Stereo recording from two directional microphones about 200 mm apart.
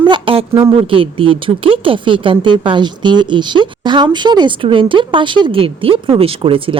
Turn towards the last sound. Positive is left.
turn(degrees=-25)  # may be behind; listen again after turning